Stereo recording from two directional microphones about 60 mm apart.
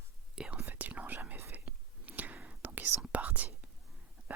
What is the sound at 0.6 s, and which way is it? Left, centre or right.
Whispering, right.